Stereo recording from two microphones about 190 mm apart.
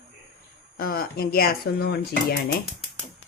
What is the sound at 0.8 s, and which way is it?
Speech, 50° left (ahead or behind).